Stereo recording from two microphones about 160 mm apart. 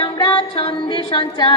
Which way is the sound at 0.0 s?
30° left (ahead or behind).